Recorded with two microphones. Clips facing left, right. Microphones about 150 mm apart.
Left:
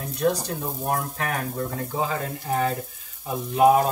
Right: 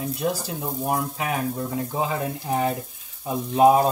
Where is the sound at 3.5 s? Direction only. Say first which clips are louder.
Right 1 dB; 25° right (ahead or behind).